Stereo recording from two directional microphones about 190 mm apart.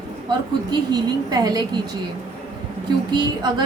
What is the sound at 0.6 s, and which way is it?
Speech, 20° right (ahead or behind).